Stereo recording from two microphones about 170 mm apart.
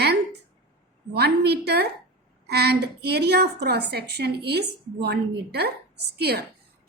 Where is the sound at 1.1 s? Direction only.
75° right (ahead or behind).